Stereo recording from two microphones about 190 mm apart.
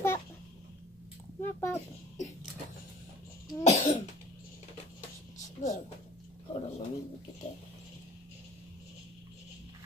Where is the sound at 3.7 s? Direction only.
40° left (ahead or behind).